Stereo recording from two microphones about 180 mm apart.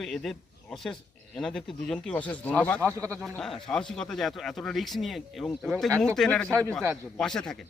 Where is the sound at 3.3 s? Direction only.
5° left (ahead or behind).